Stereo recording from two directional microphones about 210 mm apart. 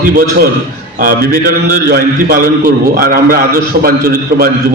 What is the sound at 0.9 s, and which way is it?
A man's voice, 45° right (ahead or behind).